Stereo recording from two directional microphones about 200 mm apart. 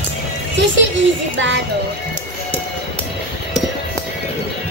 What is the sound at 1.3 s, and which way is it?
Speech, 70° right (ahead or behind).